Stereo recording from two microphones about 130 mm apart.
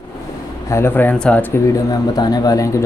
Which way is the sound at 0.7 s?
20° left (ahead or behind).